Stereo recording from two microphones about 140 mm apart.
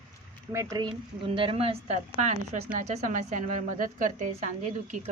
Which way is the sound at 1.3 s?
40° right (ahead or behind).